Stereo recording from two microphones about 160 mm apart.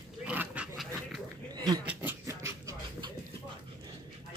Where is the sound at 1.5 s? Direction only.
25° right (ahead or behind).